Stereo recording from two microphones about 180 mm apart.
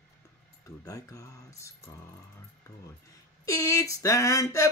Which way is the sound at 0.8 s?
20° left (ahead or behind).